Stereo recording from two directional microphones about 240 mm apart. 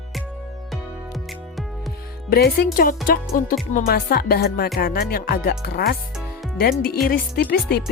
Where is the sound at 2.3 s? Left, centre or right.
Left.